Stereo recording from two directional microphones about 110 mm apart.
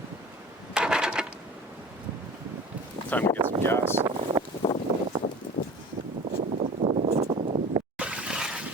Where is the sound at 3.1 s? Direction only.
15° left (ahead or behind).